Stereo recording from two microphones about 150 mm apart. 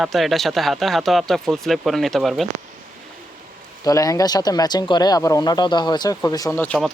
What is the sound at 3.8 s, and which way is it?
Speech, 25° left (ahead or behind).